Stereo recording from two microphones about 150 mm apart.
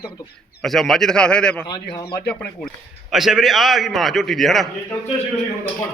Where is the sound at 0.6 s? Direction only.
Centre (ahead or behind).